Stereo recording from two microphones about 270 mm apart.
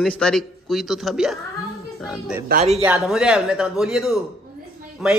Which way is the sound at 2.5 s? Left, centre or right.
Right.